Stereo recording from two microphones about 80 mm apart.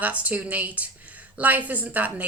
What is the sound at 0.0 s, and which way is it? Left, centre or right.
Speech, centre.